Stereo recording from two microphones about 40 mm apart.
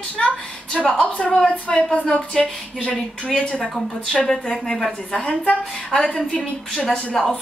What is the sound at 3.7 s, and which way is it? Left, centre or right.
Speech, centre.